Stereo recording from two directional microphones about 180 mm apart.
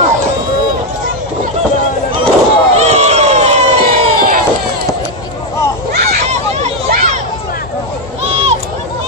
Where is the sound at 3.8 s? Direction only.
50° right (ahead or behind).